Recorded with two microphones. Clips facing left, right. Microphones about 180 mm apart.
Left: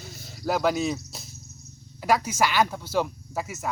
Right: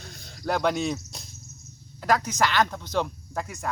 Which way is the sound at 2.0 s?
10° left (ahead or behind).